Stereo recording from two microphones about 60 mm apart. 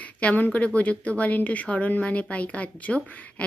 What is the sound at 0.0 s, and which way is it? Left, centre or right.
A woman's voice, left.